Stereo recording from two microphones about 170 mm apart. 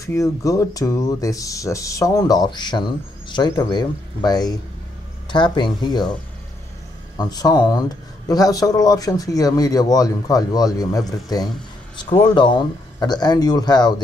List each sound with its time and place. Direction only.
0.0 s speech: 20° left (ahead or behind)
7.2 s speech: 20° left (ahead or behind)